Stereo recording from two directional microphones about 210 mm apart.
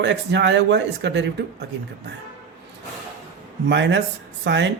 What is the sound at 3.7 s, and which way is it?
Speech, 55° right (ahead or behind).